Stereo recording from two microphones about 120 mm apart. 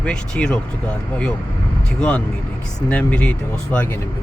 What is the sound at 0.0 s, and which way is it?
Speech, 10° left (ahead or behind).